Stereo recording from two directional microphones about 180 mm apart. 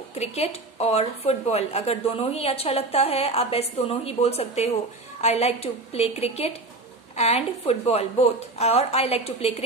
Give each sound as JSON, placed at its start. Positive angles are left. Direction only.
{"t": 0.1, "sound": "a woman's voice", "side_deg": 35}